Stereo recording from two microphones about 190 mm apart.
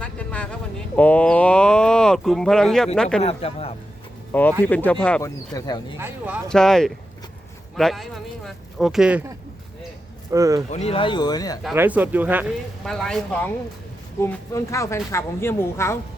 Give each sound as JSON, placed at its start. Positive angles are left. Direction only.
{"t": 0.0, "sound": "a sound", "side_deg": 5}
{"t": 0.9, "sound": "speech", "side_deg": 5}
{"t": 3.2, "sound": "speech", "side_deg": 30}
{"t": 4.3, "sound": "speech", "side_deg": 10}
{"t": 5.2, "sound": "speech", "side_deg": 20}
{"t": 6.0, "sound": "speech", "side_deg": -10}
{"t": 6.5, "sound": "speech", "side_deg": 5}
{"t": 10.3, "sound": "speech", "side_deg": -15}
{"t": 10.7, "sound": "speech", "side_deg": 35}
{"t": 11.7, "sound": "speech", "side_deg": -10}
{"t": 12.8, "sound": "speech", "side_deg": 0}